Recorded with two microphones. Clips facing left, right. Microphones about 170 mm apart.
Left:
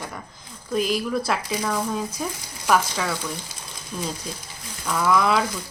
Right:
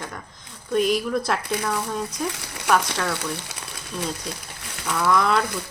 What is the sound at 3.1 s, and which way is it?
Frying, 70° right (ahead or behind).